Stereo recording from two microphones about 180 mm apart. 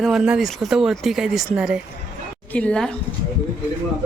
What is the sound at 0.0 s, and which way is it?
Speech, 5° right (ahead or behind).